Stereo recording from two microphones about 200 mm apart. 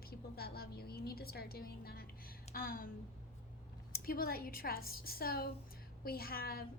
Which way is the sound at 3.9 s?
50° left (ahead or behind).